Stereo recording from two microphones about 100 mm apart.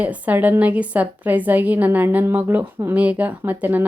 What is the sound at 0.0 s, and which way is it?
Speech, 15° right (ahead or behind).